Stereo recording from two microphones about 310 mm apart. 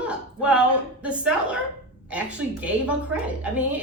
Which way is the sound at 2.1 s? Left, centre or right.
Centre.